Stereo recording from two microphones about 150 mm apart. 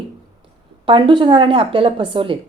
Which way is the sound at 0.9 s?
35° right (ahead or behind).